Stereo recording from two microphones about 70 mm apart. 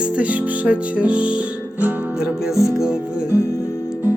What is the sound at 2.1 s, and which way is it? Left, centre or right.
Speech, centre.